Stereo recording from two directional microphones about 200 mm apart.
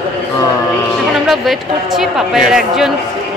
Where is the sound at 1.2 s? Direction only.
Centre (ahead or behind).